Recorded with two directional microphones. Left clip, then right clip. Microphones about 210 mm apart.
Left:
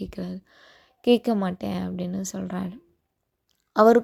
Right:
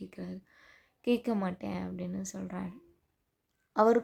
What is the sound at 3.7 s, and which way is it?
Speech, 30° left (ahead or behind).